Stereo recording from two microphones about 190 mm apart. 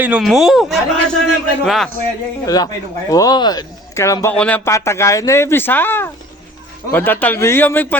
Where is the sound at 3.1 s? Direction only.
20° left (ahead or behind).